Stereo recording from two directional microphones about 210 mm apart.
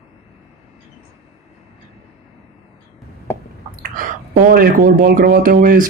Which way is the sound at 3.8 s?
40° right (ahead or behind).